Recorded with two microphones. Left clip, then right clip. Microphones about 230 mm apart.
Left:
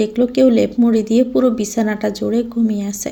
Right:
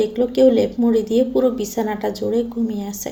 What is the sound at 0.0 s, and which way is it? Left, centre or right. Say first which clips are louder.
A woman's voice: left 1 dB; left.